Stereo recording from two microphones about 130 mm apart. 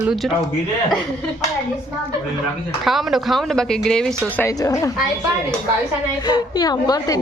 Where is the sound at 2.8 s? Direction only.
Centre (ahead or behind).